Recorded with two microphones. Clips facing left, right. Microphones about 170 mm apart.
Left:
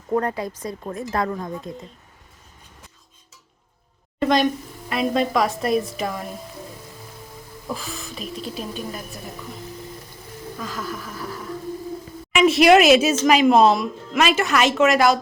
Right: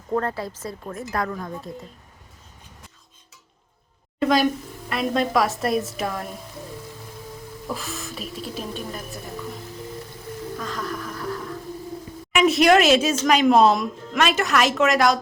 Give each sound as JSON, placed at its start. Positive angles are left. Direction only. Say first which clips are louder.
{"t": 0.1, "sound": "speech", "louder": "left 2 dB", "side_deg": 15}
{"t": 4.2, "sound": "speech", "louder": "left 1 dB", "side_deg": -5}
{"t": 7.7, "sound": "speech", "louder": "left 1 dB", "side_deg": 0}
{"t": 10.6, "sound": "music", "louder": "left 2 dB", "side_deg": 5}
{"t": 12.3, "sound": "speech", "louder": "left 2 dB", "side_deg": 0}